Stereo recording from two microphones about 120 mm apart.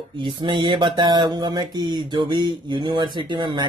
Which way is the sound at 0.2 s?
40° right (ahead or behind).